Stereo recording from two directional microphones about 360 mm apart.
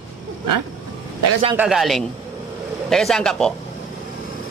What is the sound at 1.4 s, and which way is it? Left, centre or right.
Speech, centre.